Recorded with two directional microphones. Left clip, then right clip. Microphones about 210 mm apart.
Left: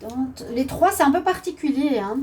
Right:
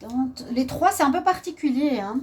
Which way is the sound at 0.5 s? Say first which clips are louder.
Left 2 dB; 40° right (ahead or behind).